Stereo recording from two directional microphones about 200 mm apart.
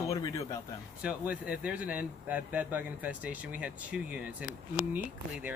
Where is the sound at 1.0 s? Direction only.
5° right (ahead or behind).